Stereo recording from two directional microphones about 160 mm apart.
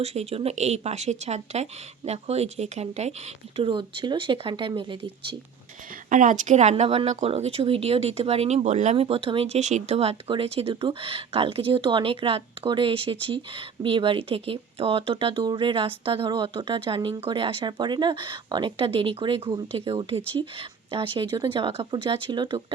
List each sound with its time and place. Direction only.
0.0 s speech: 40° right (ahead or behind)
6.1 s speech: 55° right (ahead or behind); by 22.6 s 30° right (ahead or behind)